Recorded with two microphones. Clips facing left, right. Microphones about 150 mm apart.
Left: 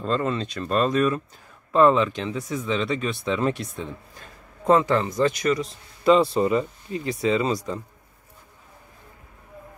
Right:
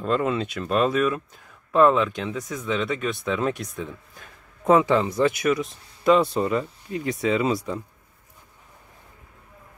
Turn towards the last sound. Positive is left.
turn(degrees=-5)  # may be behind; listen again after turning